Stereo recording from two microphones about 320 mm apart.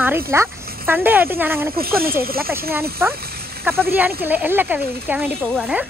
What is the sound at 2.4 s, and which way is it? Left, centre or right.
Speech, centre.